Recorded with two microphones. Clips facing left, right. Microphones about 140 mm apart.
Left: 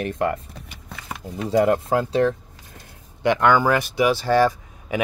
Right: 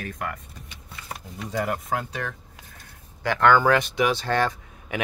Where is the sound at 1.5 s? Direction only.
25° left (ahead or behind).